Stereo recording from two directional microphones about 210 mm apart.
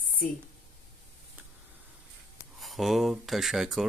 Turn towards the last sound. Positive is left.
turn(degrees=0)  # may be behind; listen again after turning